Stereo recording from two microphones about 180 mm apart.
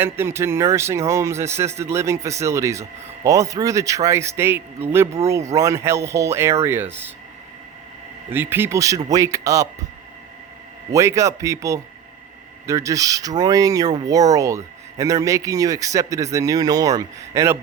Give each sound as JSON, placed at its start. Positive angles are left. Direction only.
{"t": 0.0, "sound": "speech", "side_deg": -15}
{"t": 5.2, "sound": "speech", "side_deg": -35}
{"t": 5.5, "sound": "speech", "side_deg": -15}
{"t": 8.3, "sound": "speech", "side_deg": -10}
{"t": 10.9, "sound": "speech", "side_deg": -15}